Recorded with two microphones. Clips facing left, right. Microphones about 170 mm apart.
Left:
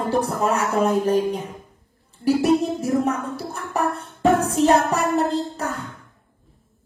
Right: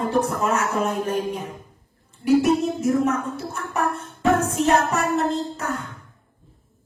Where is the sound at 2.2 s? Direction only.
35° left (ahead or behind).